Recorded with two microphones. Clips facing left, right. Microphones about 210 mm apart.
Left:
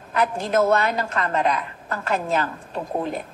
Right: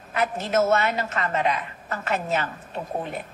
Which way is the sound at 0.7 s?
35° left (ahead or behind).